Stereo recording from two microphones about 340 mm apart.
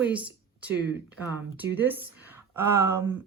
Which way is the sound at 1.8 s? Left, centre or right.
Centre.